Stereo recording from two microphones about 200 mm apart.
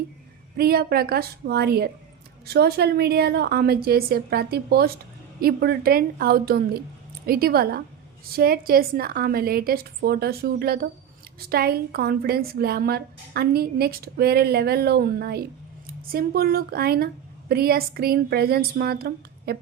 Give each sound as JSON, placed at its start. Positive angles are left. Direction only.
{"t": 0.5, "sound": "a woman's voice", "side_deg": -50}